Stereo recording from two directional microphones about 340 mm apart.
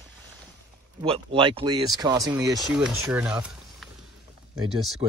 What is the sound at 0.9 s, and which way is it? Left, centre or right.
Speech, centre.